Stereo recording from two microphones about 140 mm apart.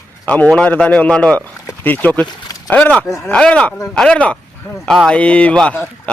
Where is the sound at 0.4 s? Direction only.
5° left (ahead or behind).